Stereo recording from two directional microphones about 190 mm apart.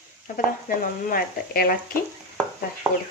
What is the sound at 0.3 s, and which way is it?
Speech, 50° left (ahead or behind).